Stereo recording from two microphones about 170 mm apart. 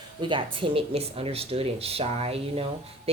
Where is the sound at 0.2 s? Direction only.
30° right (ahead or behind).